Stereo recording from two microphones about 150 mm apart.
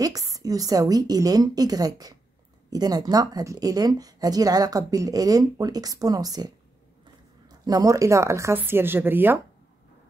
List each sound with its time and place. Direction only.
0.0 s speech: 25° right (ahead or behind)